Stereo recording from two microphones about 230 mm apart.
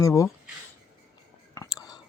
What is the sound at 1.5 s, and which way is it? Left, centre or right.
Whispering, centre.